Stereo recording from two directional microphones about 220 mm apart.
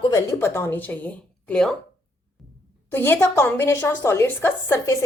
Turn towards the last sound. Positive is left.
turn(degrees=10)  # may be behind; listen again after turning